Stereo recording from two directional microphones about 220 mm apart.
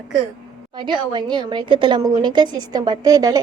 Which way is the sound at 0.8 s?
20° right (ahead or behind).